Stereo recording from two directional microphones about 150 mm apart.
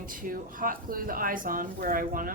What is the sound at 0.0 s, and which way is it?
Speech, 65° right (ahead or behind).